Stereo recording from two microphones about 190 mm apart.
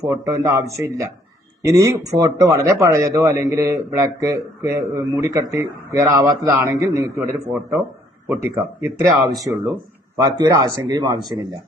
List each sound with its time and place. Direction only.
0.0 s speech: 15° right (ahead or behind)
8.5 s speech: 15° right (ahead or behind)